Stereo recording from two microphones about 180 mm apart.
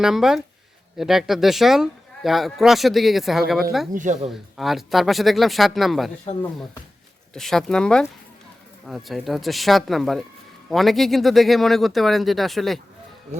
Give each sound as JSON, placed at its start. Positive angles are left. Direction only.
{"t": 0.0, "sound": "speech", "side_deg": 0}
{"t": 3.9, "sound": "speech", "side_deg": -45}
{"t": 4.3, "sound": "speech", "side_deg": 0}
{"t": 6.3, "sound": "speech", "side_deg": 30}
{"t": 7.3, "sound": "speech", "side_deg": 0}